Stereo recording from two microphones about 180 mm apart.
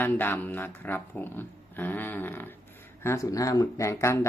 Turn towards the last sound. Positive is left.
turn(degrees=15)  # may be behind; listen again after turning